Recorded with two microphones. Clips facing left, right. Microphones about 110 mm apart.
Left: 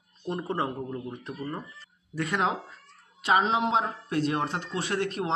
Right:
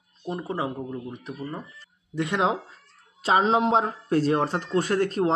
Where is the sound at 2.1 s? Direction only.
20° right (ahead or behind).